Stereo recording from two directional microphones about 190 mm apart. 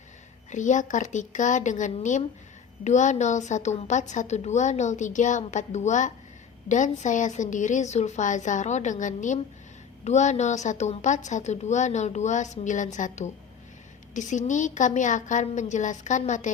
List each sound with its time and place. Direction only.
0.5 s a woman's voice: 40° left (ahead or behind)